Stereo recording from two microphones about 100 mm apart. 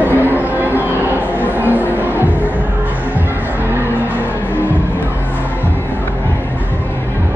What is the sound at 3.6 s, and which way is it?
Vehicle, 20° right (ahead or behind).